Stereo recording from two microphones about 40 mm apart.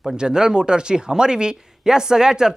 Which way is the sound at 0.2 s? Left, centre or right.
Centre.